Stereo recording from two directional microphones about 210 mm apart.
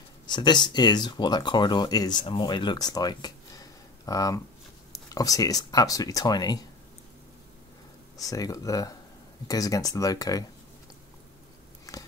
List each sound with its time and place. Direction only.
0.3 s speech: 20° left (ahead or behind)
8.2 s speech: 15° left (ahead or behind)
11.9 s biting: 15° left (ahead or behind)